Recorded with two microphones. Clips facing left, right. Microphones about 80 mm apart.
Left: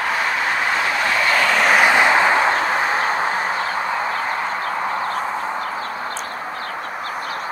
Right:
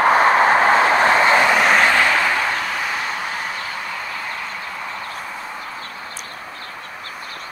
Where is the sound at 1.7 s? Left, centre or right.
Centre; by 3.3 s left.